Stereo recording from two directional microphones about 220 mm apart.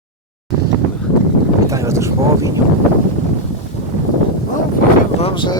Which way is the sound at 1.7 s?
15° right (ahead or behind).